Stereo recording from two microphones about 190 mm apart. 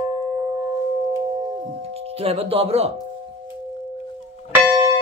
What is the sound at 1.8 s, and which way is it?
Music, 30° right (ahead or behind).